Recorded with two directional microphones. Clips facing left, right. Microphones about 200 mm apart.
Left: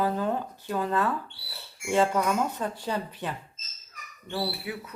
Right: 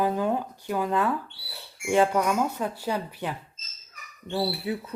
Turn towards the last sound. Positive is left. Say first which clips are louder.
# right 4 dB
turn(degrees=-25)  # may be behind; listen again after turning